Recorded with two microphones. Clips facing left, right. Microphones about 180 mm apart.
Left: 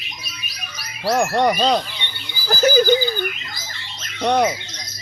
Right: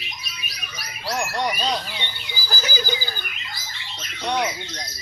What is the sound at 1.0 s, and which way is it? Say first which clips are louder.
Speech: left 8 dB; 55° left (ahead or behind).